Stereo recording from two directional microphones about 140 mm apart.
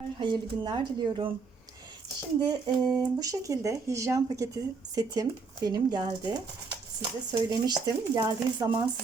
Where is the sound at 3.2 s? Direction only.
25° right (ahead or behind).